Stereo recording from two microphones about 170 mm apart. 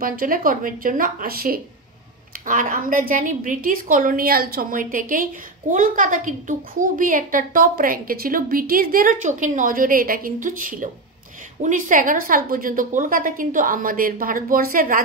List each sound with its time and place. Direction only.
0.0 s a woman's voice: 55° right (ahead or behind)